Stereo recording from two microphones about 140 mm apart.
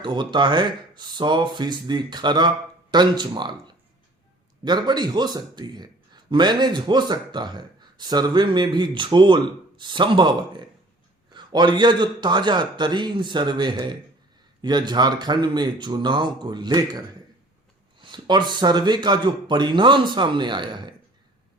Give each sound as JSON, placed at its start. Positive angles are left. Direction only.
{"t": 0.0, "sound": "speech", "side_deg": -35}
{"t": 18.0, "sound": "speech", "side_deg": -35}